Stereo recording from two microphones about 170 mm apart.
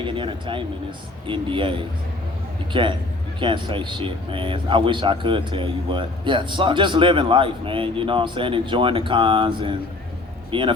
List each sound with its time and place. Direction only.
0.0 s speech: 30° right (ahead or behind)